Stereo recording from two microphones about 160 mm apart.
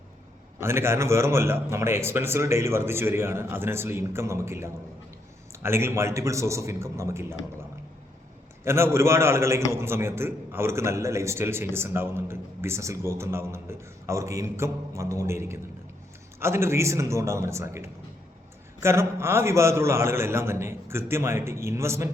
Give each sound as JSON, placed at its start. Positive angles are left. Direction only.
{"t": 0.6, "sound": "a man's voice", "side_deg": -15}
{"t": 8.6, "sound": "a man's voice", "side_deg": -15}